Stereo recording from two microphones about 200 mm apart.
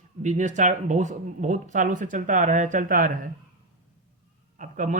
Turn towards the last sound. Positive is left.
turn(degrees=-40)  # may be behind; listen again after turning